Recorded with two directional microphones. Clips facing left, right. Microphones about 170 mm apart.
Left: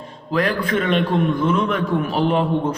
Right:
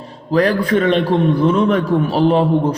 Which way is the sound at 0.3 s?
40° right (ahead or behind).